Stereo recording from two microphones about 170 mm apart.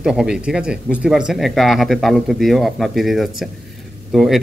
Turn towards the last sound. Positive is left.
turn(degrees=0)  # may be behind; listen again after turning